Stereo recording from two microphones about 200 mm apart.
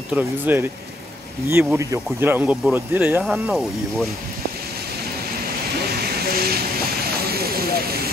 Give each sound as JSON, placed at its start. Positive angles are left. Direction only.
{"t": 0.1, "sound": "speech", "side_deg": -10}
{"t": 6.1, "sound": "vehicle", "side_deg": -50}